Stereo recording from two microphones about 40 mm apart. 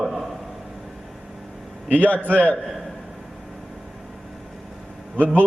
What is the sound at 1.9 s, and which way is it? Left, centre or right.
Speech, left.